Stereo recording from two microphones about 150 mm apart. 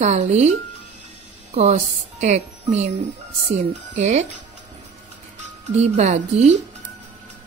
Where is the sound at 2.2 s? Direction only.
50° right (ahead or behind).